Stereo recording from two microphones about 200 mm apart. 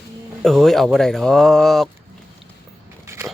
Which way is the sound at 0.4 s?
Centre (ahead or behind).